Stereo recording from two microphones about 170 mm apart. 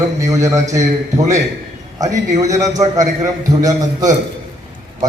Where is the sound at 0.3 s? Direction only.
20° right (ahead or behind).